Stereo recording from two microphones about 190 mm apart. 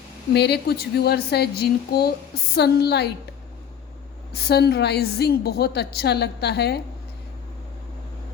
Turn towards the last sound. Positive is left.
turn(degrees=60)  # may be behind; listen again after turning